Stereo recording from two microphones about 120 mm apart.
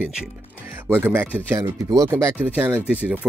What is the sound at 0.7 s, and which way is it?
Speech, 15° right (ahead or behind).